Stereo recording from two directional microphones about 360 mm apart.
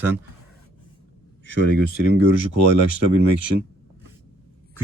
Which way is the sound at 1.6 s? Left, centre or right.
Left.